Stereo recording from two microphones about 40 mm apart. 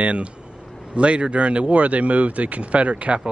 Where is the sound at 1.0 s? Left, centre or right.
Right.